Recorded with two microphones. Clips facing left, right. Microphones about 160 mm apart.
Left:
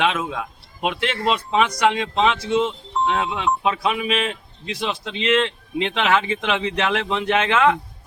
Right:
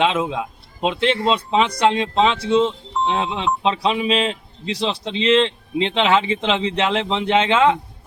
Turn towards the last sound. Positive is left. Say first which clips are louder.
# right 2 dB
turn(degrees=-25)  # may be behind; listen again after turning